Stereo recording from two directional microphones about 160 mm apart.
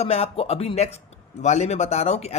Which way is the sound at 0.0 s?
40° left (ahead or behind).